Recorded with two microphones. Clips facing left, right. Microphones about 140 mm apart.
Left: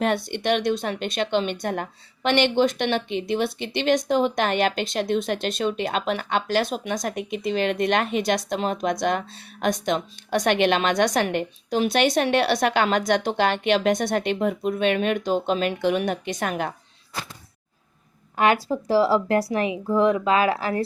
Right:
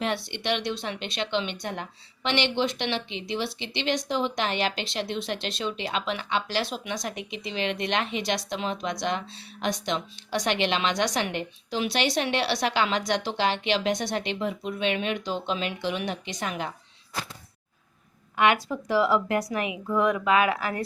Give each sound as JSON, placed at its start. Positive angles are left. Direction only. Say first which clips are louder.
{"t": 0.0, "sound": "speech", "louder": "left 6 dB", "side_deg": 50}
{"t": 18.3, "sound": "speech", "louder": "left 3 dB", "side_deg": 35}